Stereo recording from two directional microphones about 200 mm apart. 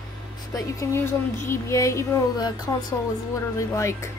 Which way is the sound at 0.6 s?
15° left (ahead or behind).